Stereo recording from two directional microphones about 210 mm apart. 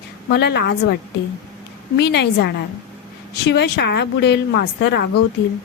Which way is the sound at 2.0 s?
50° left (ahead or behind).